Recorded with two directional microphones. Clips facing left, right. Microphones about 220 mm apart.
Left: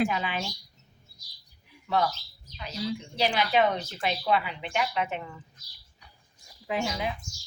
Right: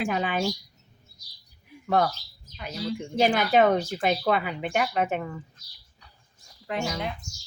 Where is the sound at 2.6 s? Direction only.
55° right (ahead or behind).